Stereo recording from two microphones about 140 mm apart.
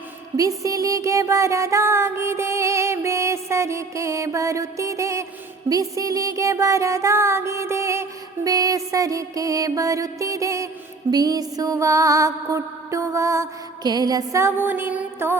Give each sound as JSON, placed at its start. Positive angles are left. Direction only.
{"t": 0.3, "sound": "music", "side_deg": -25}